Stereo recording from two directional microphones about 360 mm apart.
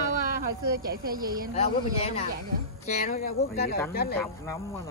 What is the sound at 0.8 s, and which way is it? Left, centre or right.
Speech, right.